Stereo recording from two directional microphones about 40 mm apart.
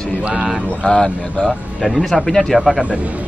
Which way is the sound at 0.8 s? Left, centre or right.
Left.